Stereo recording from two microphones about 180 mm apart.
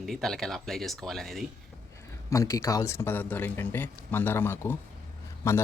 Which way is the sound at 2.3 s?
15° left (ahead or behind).